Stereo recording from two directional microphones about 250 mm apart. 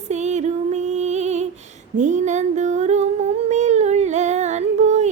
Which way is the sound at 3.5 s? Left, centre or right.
Right.